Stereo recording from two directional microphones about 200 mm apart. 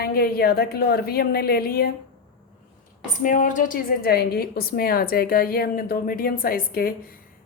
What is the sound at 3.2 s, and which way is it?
A woman's voice, 40° left (ahead or behind).